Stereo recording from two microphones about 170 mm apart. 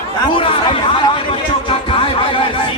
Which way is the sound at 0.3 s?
30° left (ahead or behind).